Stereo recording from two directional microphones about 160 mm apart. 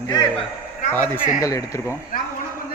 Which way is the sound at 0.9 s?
15° left (ahead or behind).